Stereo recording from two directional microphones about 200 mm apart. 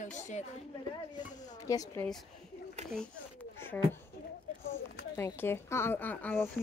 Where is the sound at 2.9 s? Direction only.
5° left (ahead or behind).